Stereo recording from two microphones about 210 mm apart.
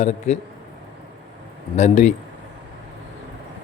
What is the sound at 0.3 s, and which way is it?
Speech, 30° left (ahead or behind).